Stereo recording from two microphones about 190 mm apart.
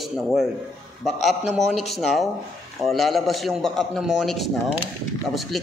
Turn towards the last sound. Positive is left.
turn(degrees=0)  # may be behind; listen again after turning